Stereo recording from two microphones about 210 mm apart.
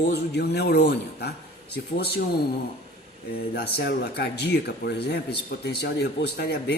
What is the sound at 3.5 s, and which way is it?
Speech, 50° left (ahead or behind).